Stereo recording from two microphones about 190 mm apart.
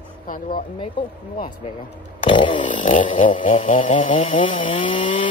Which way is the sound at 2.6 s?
40° left (ahead or behind).